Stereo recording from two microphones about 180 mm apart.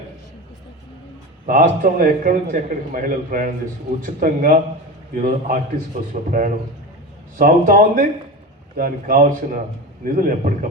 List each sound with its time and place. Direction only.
1.5 s a man's voice: 45° right (ahead or behind)